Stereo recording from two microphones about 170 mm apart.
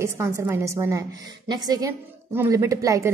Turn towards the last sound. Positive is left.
turn(degrees=-20)  # may be behind; listen again after turning